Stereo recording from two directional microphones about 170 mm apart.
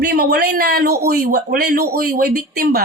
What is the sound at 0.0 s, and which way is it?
Speech, 65° right (ahead or behind).